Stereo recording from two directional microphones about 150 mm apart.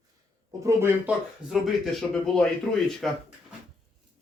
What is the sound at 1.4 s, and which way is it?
Speech, centre (ahead or behind).